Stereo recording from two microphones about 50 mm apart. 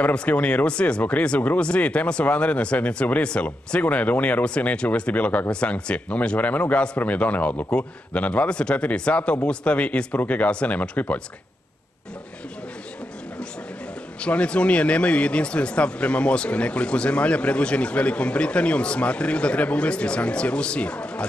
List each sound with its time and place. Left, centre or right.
0.0 s speech: left
14.2 s speech: left